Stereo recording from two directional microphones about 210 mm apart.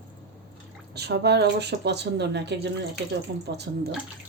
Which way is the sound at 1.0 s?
50° right (ahead or behind).